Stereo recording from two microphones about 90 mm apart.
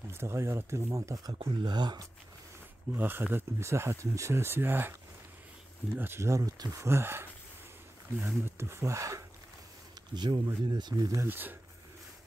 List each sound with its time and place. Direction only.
0.1 s speech: 30° right (ahead or behind)
1.4 s speech: 60° right (ahead or behind)
2.9 s speech: 25° right (ahead or behind)
5.9 s speech: 25° right (ahead or behind)
8.5 s speech: 30° right (ahead or behind)
10.1 s speech: 60° right (ahead or behind)
11.2 s speech: 20° right (ahead or behind)